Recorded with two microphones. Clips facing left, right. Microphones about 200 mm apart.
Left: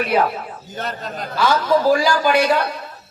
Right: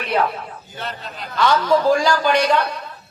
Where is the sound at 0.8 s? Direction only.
45° left (ahead or behind).